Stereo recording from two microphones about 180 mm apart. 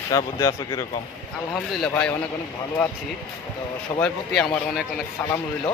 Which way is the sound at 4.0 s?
5° left (ahead or behind).